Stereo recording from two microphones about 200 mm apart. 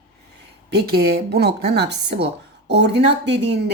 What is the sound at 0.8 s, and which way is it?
Speech, 50° right (ahead or behind).